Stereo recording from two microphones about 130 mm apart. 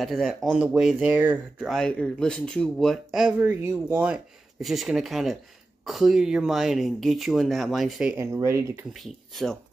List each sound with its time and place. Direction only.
0.0 s speech: centre (ahead or behind)
1.7 s speech: 5° left (ahead or behind)
8.4 s speech: 20° right (ahead or behind)
8.9 s speech: centre (ahead or behind)